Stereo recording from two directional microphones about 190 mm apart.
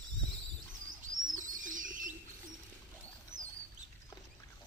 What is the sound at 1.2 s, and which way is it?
Bird, 45° right (ahead or behind).